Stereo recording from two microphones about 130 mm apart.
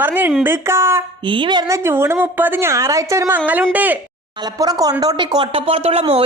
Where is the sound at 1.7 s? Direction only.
20° right (ahead or behind).